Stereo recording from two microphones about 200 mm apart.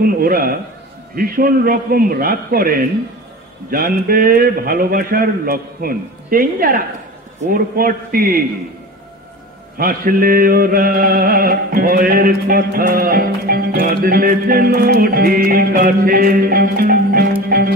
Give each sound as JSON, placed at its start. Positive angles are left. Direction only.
{"t": 0.0, "sound": "speech", "side_deg": -45}
{"t": 1.1, "sound": "chant", "side_deg": -45}
{"t": 9.8, "sound": "chant", "side_deg": -45}
{"t": 17.5, "sound": "music", "side_deg": -50}